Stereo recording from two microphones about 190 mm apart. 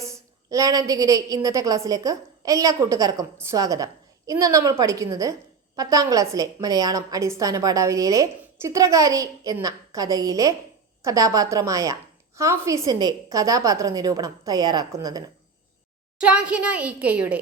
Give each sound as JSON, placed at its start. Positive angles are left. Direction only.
{"t": 0.0, "sound": "a woman's voice", "side_deg": -15}
{"t": 16.1, "sound": "a woman's voice", "side_deg": -5}